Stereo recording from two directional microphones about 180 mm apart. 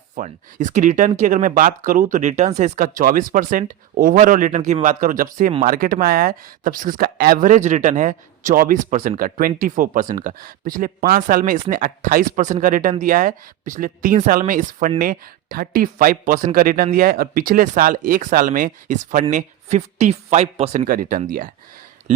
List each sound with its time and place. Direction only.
0.2 s speech: 45° right (ahead or behind)
20.8 s speech: 50° right (ahead or behind)